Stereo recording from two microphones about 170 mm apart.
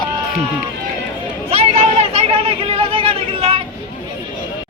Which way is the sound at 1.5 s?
35° right (ahead or behind).